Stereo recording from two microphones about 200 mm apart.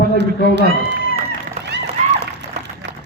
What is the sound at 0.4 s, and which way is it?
Speech, 55° right (ahead or behind).